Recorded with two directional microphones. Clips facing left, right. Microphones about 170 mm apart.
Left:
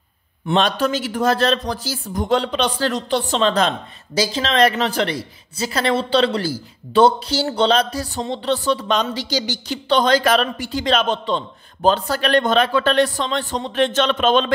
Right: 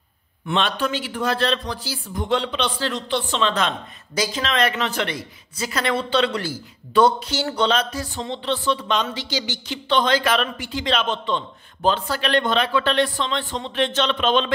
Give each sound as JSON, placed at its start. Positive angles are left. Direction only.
{"t": 0.5, "sound": "speech", "side_deg": 40}